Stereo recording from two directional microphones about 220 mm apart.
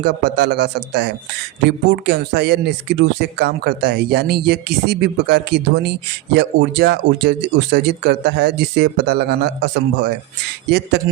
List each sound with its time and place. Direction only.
0.0 s speech: 50° right (ahead or behind)